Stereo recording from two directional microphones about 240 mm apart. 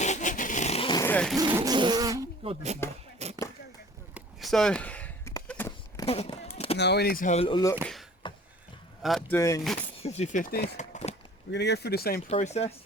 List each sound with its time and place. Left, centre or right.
0.0 s vehicle: left
1.0 s speech: centre
1.4 s speech: centre
3.2 s a sound: right
4.1 s a sound: centre
6.1 s speech: left
6.7 s speech: left; by 7.8 s centre
8.2 s beatboxing: left
9.0 s speech: centre
10.0 s speech: left
11.5 s speech: left
12.3 s speech: left